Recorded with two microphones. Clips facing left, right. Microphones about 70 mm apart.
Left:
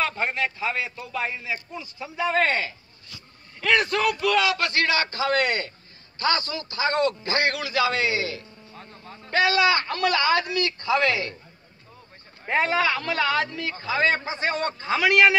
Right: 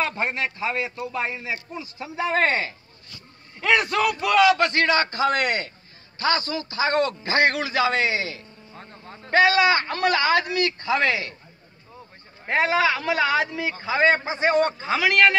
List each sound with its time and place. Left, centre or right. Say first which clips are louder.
0.1 s a man's voice: even; centre; by 2.7 s right
3.6 s a man's voice: right 1 dB; centre
4.6 s a man's voice: right 3 dB; right
5.3 s a man's voice: even; centre
9.3 s a man's voice: right 3 dB; right
12.4 s a man's voice: right 2 dB; centre
14.9 s a man's voice: left 3 dB; centre